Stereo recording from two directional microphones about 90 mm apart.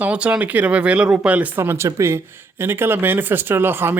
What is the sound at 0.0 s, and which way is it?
Speech, 15° right (ahead or behind).